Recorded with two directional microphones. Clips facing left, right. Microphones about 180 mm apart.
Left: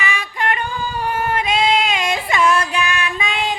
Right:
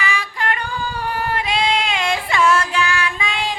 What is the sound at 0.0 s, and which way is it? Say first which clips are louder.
Female singing: left 1 dB; 20° left (ahead or behind).